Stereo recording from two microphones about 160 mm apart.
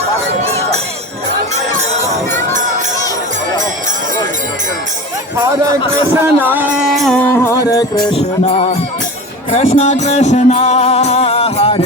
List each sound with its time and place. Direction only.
0.4 s music: 15° left (ahead or behind)
2.5 s crowd: 55° right (ahead or behind)
5.4 s music: 15° right (ahead or behind)
7.0 s music: 5° left (ahead or behind)
8.1 s music: 40° left (ahead or behind)